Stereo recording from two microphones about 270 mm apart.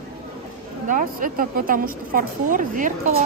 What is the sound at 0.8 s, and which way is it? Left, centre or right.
A woman's voice, right.